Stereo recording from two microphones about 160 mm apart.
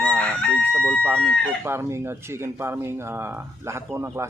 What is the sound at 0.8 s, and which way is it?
Chicken, 5° left (ahead or behind).